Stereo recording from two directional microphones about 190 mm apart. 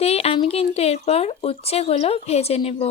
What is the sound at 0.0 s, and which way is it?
Speech, 30° left (ahead or behind).